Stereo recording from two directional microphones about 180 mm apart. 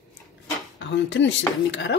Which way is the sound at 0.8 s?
90° left.